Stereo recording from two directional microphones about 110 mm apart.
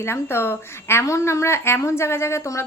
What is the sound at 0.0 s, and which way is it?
A woman's voice, 20° left (ahead or behind).